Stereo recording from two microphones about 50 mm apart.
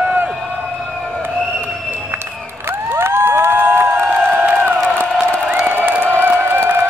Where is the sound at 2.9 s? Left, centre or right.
Right.